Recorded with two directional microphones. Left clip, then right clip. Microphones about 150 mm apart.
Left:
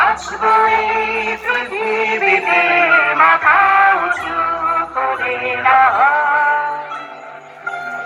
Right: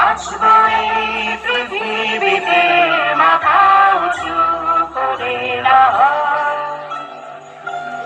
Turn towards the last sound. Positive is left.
turn(degrees=-30)  # may be behind; listen again after turning